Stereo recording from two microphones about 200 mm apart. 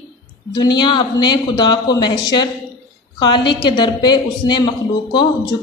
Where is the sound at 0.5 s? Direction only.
20° left (ahead or behind).